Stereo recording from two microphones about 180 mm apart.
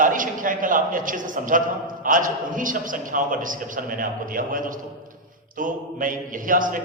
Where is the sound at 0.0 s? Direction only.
50° right (ahead or behind).